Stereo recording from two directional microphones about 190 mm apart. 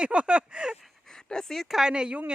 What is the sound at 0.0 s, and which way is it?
Speech, 5° right (ahead or behind).